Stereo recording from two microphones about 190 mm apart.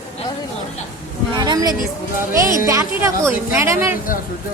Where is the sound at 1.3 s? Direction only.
20° right (ahead or behind).